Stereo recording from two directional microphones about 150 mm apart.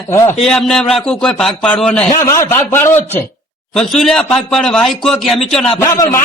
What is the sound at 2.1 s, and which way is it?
A man's voice, 25° left (ahead or behind).